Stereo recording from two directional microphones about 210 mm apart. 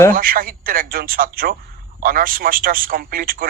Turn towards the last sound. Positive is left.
turn(degrees=-45)  # may be behind; listen again after turning